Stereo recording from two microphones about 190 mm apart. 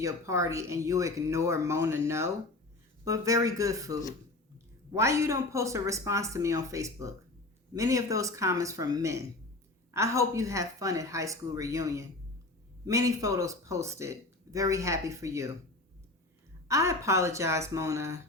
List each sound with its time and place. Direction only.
0.0 s speech: 15° right (ahead or behind)
4.9 s speech: 15° right (ahead or behind)
16.6 s speech: 15° right (ahead or behind)